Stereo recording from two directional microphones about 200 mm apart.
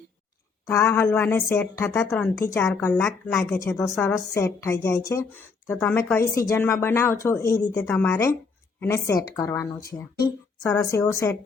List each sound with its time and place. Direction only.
0.6 s a woman's voice: 15° left (ahead or behind)
2.4 s a woman's voice: 15° left (ahead or behind)
3.8 s a woman's voice: centre (ahead or behind)
4.4 s a woman's voice: 15° left (ahead or behind)
10.9 s a woman's voice: 15° left (ahead or behind)